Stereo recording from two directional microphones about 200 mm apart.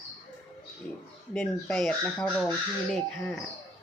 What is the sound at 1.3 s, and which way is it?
Speech, 5° left (ahead or behind).